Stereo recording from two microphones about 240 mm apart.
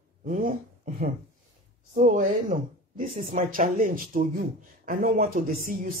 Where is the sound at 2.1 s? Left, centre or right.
Right.